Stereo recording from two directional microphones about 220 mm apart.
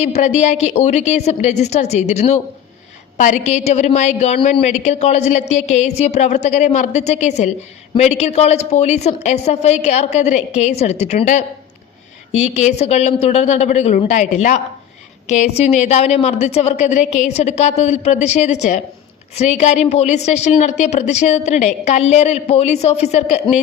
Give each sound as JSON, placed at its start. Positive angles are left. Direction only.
{"t": 0.0, "sound": "a woman's voice", "side_deg": 30}